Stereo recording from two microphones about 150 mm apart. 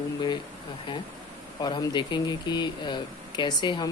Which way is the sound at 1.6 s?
30° left (ahead or behind).